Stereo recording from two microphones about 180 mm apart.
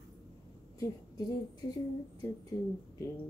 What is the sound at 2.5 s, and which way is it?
Speech, 20° left (ahead or behind).